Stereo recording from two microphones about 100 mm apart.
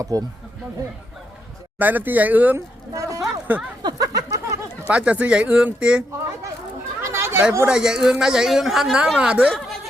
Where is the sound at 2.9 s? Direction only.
35° right (ahead or behind).